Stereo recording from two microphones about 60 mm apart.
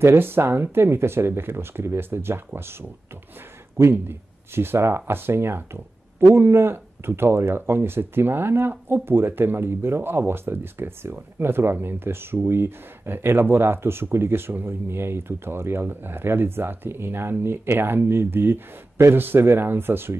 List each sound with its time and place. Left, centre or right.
0.0 s speech: right
3.9 s speech: right